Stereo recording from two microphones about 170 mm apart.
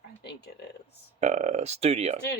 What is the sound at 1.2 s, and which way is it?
Speech, 40° right (ahead or behind).